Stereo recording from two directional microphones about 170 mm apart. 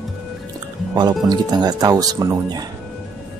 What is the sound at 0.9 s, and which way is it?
Speech, 25° right (ahead or behind).